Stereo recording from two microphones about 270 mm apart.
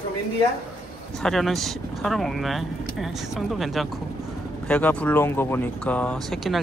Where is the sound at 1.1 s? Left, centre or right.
Centre.